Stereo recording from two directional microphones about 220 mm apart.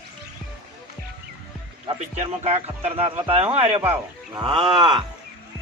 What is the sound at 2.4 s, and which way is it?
Speech, 30° right (ahead or behind).